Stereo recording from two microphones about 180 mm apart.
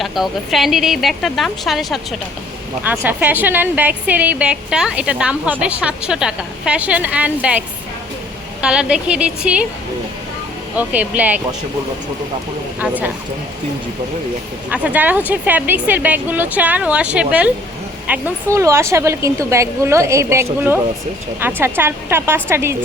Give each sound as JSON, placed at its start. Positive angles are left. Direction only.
{"t": 0.0, "sound": "a woman's voice", "side_deg": 0}
{"t": 8.6, "sound": "speech", "side_deg": -5}
{"t": 10.8, "sound": "a woman's voice", "side_deg": -10}
{"t": 12.8, "sound": "a woman's voice", "side_deg": -10}
{"t": 14.7, "sound": "a woman's voice", "side_deg": -5}